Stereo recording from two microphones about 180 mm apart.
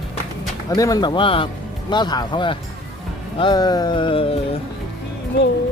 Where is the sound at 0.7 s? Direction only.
20° left (ahead or behind).